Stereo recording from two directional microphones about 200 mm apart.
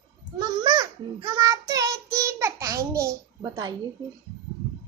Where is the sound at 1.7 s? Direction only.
15° right (ahead or behind).